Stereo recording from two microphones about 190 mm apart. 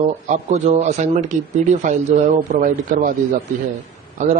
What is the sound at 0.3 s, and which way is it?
Speech, 35° right (ahead or behind).